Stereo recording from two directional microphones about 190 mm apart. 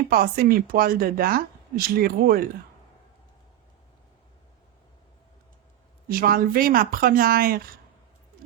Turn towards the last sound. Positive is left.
turn(degrees=-50)  # may be behind; listen again after turning